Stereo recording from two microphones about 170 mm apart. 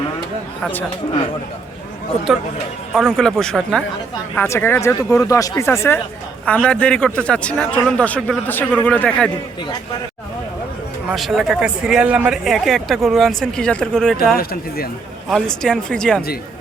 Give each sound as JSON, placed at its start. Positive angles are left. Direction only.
{"t": 0.6, "sound": "a man's voice", "side_deg": 10}
{"t": 2.9, "sound": "speech", "side_deg": 0}
{"t": 4.4, "sound": "a man's voice", "side_deg": 15}
{"t": 11.1, "sound": "speech", "side_deg": 0}
{"t": 14.3, "sound": "speech", "side_deg": 60}
{"t": 15.3, "sound": "speech", "side_deg": 5}